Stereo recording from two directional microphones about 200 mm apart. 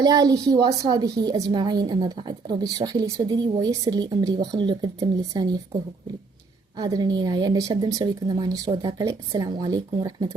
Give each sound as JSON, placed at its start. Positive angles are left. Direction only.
{"t": 0.0, "sound": "a woman's voice", "side_deg": -20}
{"t": 6.7, "sound": "a woman's voice", "side_deg": -20}